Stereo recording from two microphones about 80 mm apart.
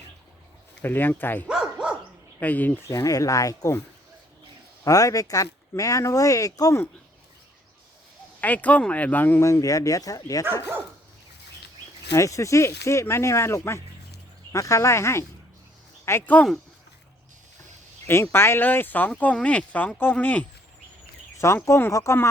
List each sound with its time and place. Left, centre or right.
0.8 s speech: left
1.5 s dog: centre
2.4 s speech: left
2.9 s speech: left
4.8 s speech: left
8.4 s speech: centre
9.4 s speech: left
12.1 s speech: left
16.2 s speech: left
18.1 s speech: left
21.3 s speech: left